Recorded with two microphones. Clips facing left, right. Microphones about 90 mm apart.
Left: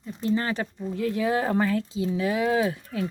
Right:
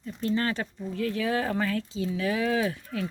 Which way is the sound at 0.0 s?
15° left (ahead or behind).